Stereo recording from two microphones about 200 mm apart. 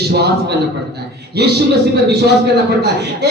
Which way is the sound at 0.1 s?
55° right (ahead or behind).